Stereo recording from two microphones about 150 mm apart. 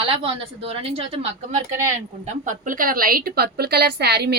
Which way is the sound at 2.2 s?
55° right (ahead or behind).